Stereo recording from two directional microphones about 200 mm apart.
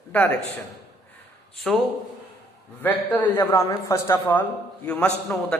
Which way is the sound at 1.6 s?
Centre (ahead or behind).